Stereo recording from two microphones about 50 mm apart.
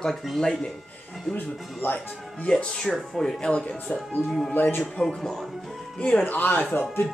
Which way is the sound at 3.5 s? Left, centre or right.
Left.